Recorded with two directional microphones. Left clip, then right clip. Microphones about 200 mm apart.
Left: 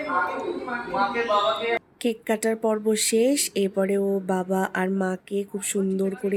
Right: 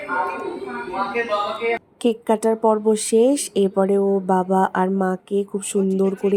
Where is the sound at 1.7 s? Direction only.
15° right (ahead or behind).